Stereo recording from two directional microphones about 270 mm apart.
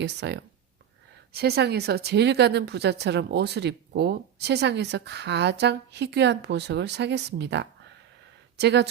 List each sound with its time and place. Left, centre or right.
0.0 s speech: right